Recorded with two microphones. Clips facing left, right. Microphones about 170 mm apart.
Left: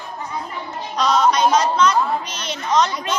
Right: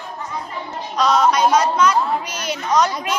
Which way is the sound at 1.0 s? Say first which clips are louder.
Right 1 dB; 5° right (ahead or behind).